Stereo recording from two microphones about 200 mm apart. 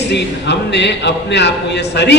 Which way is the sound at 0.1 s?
60° left (ahead or behind).